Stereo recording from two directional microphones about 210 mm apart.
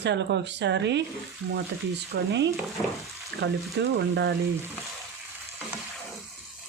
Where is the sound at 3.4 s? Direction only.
55° right (ahead or behind).